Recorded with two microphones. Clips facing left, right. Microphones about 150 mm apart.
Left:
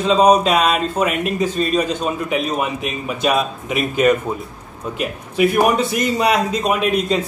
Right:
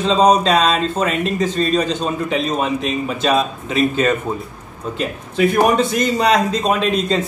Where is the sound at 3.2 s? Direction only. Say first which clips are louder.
Even; 25° right (ahead or behind).